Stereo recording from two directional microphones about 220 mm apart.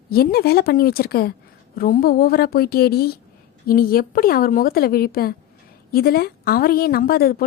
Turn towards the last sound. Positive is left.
turn(degrees=45)  # may be behind; listen again after turning